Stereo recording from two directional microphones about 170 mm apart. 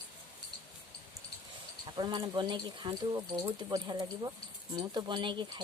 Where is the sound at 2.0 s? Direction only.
25° right (ahead or behind).